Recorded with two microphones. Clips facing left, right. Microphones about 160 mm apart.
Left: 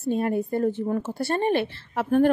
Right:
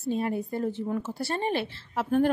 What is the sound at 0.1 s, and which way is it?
A woman's voice, 55° left (ahead or behind).